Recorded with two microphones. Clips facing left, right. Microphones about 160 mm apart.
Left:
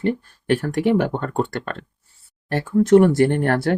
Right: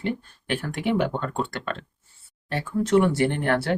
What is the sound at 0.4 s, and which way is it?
Speech, 50° left (ahead or behind).